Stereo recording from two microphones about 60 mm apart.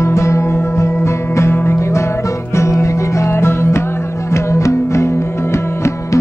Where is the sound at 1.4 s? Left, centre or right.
Left.